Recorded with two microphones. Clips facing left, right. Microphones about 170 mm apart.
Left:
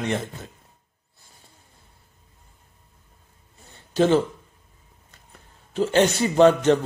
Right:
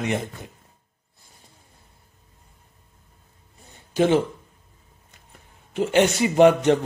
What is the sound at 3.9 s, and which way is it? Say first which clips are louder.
Speech: even; 15° right (ahead or behind).